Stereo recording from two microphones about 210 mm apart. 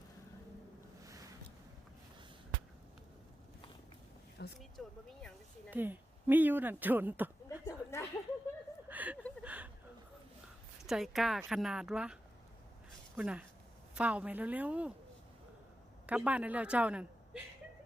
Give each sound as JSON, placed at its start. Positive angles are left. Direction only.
{"t": 4.4, "sound": "speech", "side_deg": 50}
{"t": 4.8, "sound": "speech", "side_deg": 0}
{"t": 5.7, "sound": "speech", "side_deg": -10}
{"t": 7.4, "sound": "a sound", "side_deg": 15}
{"t": 8.9, "sound": "a sound", "side_deg": -5}
{"t": 10.8, "sound": "speech", "side_deg": 0}
{"t": 16.0, "sound": "speech", "side_deg": -5}